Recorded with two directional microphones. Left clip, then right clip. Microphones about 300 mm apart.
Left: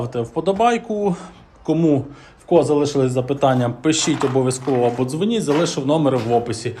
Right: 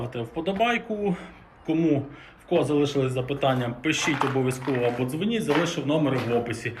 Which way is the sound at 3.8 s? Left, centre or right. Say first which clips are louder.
Left 6 dB; centre.